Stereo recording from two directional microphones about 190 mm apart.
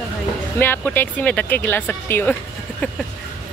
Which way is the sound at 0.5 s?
10° left (ahead or behind).